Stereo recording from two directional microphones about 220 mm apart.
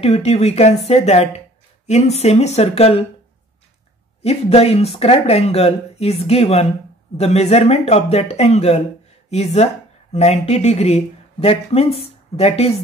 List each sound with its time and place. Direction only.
0.0 s speech: 30° left (ahead or behind)
4.2 s speech: 30° left (ahead or behind)